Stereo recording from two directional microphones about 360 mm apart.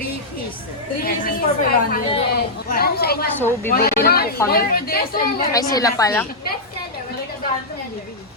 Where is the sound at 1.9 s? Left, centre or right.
Centre.